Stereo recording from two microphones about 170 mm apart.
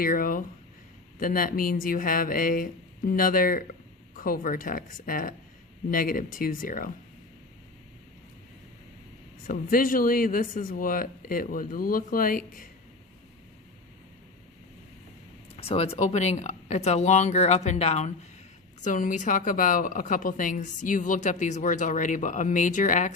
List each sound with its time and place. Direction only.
0.0 s a woman's voice: 55° left (ahead or behind)
9.5 s speech: 55° left (ahead or behind)
15.5 s speech: 35° left (ahead or behind)
18.8 s a woman's voice: 50° left (ahead or behind)